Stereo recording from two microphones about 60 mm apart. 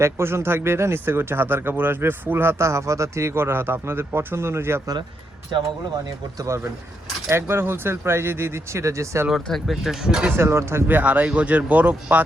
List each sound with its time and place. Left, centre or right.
0.0 s speech: right
7.3 s speech: right
9.3 s speech: centre
10.3 s speech: right
10.8 s speech: right